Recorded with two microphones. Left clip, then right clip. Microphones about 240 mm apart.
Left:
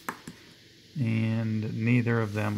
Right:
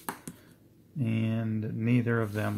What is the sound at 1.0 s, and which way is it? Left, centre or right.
Speech, centre.